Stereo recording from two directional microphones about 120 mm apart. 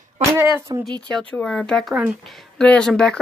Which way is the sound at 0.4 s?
25° right (ahead or behind).